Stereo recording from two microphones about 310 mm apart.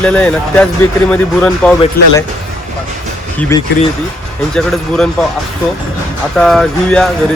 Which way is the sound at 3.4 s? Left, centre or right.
Centre.